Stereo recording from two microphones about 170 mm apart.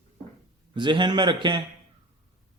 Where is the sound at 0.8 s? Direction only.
25° right (ahead or behind).